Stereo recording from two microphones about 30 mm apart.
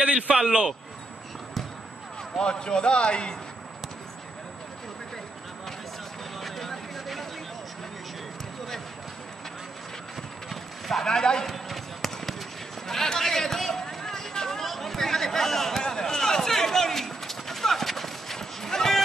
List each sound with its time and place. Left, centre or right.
0.0 s a man's voice: right
2.4 s a man's voice: left
6.4 s a sound: centre
10.5 s clip-clop: centre
11.1 s a man's voice: left
11.4 s basketball bounce: centre
12.8 s a sound: centre